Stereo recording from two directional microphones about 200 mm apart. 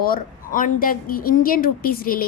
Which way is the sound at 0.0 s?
45° left (ahead or behind).